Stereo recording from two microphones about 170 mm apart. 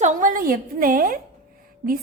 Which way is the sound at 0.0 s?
50° right (ahead or behind).